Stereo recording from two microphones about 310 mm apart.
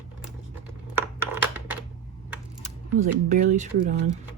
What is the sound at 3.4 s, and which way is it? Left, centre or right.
Speech, right.